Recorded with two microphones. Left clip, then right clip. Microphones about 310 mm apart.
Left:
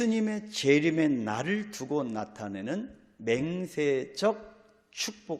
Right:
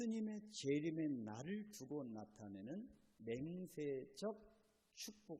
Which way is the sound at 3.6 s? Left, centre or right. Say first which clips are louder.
Left 19 dB; centre.